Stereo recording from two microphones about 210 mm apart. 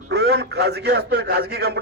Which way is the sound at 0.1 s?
50° right (ahead or behind).